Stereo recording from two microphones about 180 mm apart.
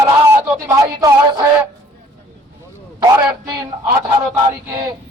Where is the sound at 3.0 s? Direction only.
15° right (ahead or behind).